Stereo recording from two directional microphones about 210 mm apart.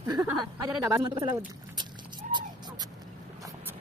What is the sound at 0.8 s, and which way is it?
Speech, 20° right (ahead or behind).